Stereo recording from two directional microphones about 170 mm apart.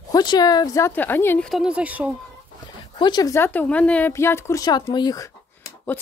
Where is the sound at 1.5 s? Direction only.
5° right (ahead or behind).